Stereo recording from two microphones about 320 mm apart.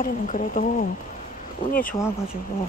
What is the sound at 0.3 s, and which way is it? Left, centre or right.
Speech, left.